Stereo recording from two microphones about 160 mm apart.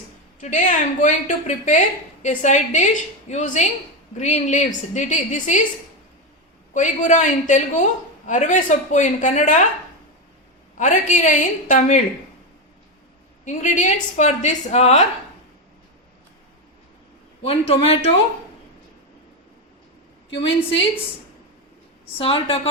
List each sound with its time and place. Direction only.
0.3 s a woman's voice: 50° left (ahead or behind)
6.7 s a woman's voice: 50° left (ahead or behind)
10.8 s a woman's voice: 50° left (ahead or behind)
13.4 s a woman's voice: 50° left (ahead or behind)
17.4 s a man's voice: 35° left (ahead or behind)
20.3 s a man's voice: 35° left (ahead or behind)
22.2 s a man's voice: 35° left (ahead or behind)